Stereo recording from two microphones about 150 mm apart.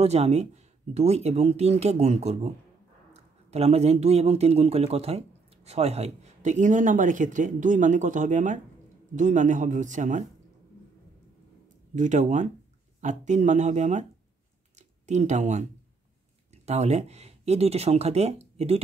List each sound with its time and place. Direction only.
0.0 s speech: 45° right (ahead or behind)
11.9 s speech: 55° right (ahead or behind)
14.8 s a sound: 50° right (ahead or behind)
16.6 s speech: 45° right (ahead or behind)